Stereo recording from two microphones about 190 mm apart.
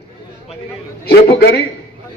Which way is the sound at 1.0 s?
55° left (ahead or behind).